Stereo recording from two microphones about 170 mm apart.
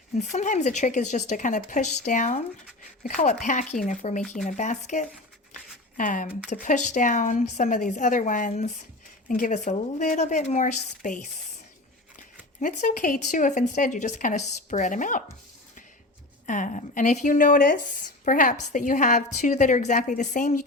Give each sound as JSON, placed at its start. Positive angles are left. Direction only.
{"t": 0.2, "sound": "a woman's voice", "side_deg": 45}
{"t": 12.5, "sound": "a woman's voice", "side_deg": 50}
{"t": 16.5, "sound": "a woman's voice", "side_deg": 45}